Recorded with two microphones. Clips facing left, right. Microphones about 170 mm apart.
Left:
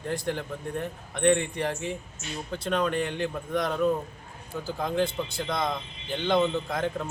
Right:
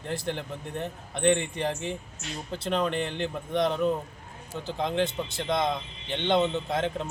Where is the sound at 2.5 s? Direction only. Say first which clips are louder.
Left 1 dB; 30° right (ahead or behind).